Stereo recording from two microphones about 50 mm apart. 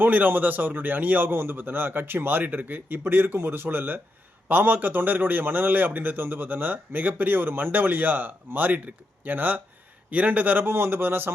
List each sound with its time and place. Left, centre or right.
0.0 s a man's voice: right
10.6 s speech: right